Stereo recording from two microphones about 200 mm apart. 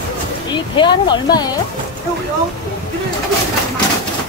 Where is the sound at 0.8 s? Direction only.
20° left (ahead or behind).